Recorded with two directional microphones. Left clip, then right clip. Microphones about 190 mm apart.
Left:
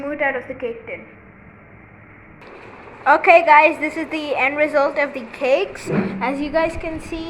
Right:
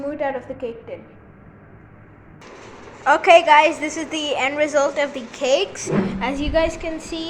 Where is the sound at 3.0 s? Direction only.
5° right (ahead or behind).